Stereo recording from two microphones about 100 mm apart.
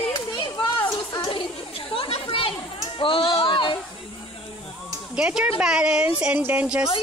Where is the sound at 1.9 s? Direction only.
60° left (ahead or behind).